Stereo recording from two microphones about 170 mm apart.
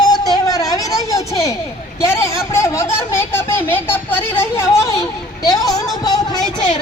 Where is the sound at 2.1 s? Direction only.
15° left (ahead or behind).